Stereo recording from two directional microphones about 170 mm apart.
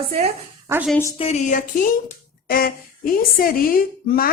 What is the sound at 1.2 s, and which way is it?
A woman's voice, 40° left (ahead or behind).